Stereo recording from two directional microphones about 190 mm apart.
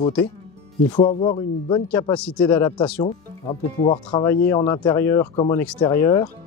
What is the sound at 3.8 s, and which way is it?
Speech, 20° left (ahead or behind).